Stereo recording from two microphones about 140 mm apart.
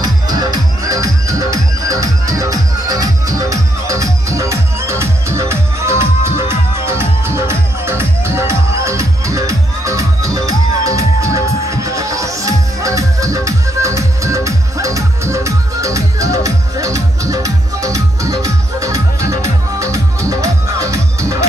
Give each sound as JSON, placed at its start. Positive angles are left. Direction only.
{"t": 0.0, "sound": "music", "side_deg": -30}